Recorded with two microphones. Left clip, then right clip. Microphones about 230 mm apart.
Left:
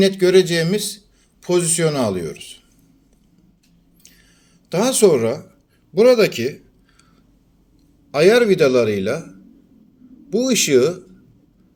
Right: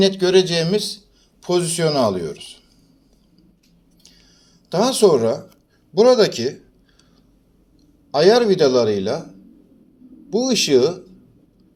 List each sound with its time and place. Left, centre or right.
0.0 s a man's voice: left
1.5 s speech: left
4.7 s speech: left
8.1 s a man's voice: left
10.7 s speech: left